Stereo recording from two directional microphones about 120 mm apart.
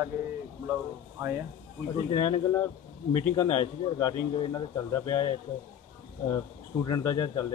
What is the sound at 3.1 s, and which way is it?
A man's voice, 25° left (ahead or behind).